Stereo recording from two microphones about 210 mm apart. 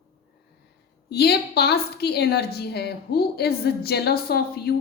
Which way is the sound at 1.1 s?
50° left (ahead or behind).